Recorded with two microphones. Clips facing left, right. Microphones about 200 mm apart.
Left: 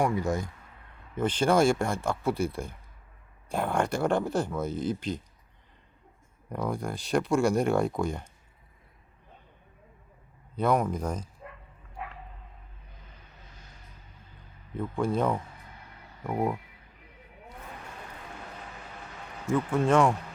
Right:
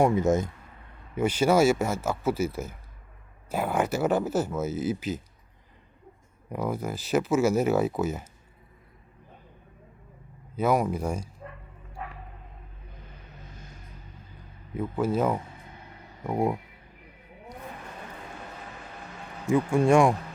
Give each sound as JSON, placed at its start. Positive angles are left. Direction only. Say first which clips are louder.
{"t": 0.0, "sound": "speech", "louder": "right 5 dB", "side_deg": -20}
{"t": 1.1, "sound": "speech", "louder": "right 2 dB", "side_deg": -10}
{"t": 6.5, "sound": "speech", "louder": "right 2 dB", "side_deg": -5}
{"t": 10.5, "sound": "speech", "louder": "right 1 dB", "side_deg": -5}
{"t": 14.8, "sound": "speech", "louder": "right 2 dB", "side_deg": -5}
{"t": 19.5, "sound": "speech", "louder": "right 4 dB", "side_deg": -10}